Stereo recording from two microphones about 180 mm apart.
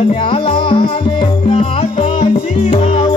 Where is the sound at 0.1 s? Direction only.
30° left (ahead or behind).